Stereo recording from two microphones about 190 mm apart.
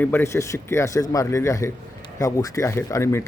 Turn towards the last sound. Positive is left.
turn(degrees=15)  # may be behind; listen again after turning